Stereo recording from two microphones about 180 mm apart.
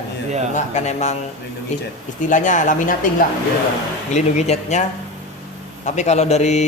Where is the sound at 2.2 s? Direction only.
45° left (ahead or behind).